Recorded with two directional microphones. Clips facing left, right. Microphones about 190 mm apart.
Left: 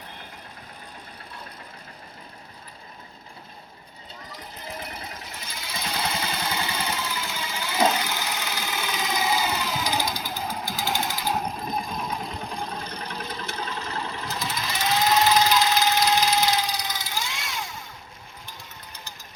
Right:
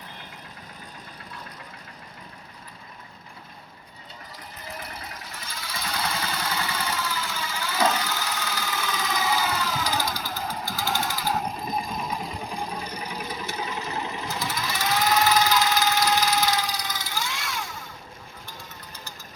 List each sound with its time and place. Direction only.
5.3 s vehicle: 20° left (ahead or behind)
11.4 s engine: 5° right (ahead or behind)
14.3 s a sound: 20° left (ahead or behind)